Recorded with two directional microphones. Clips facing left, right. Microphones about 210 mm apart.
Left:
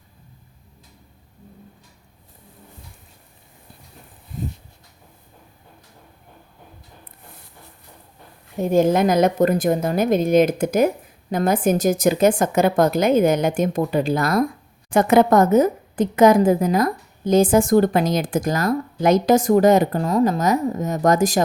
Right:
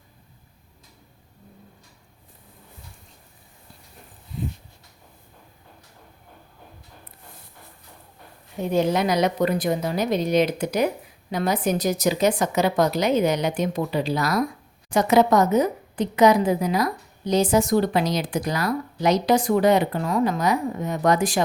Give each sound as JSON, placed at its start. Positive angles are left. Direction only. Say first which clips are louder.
{"t": 4.3, "sound": "dog", "louder": "left 1 dB", "side_deg": 45}
{"t": 8.6, "sound": "a woman's voice", "louder": "left 5 dB", "side_deg": 45}